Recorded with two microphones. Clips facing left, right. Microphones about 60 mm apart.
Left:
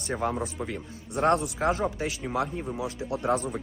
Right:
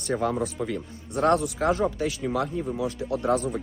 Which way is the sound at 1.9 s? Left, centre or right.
Left.